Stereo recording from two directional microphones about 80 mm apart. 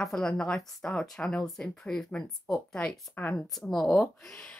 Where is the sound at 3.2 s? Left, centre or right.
Left.